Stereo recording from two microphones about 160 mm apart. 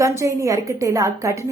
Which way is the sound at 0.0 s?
20° right (ahead or behind).